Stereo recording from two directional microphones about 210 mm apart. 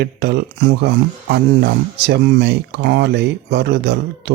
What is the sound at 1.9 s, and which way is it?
Speech, 55° right (ahead or behind).